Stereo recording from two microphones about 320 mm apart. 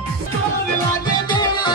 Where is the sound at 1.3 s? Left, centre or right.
Centre.